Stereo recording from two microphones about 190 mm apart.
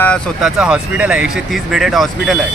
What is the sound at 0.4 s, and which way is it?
Speech, 5° right (ahead or behind).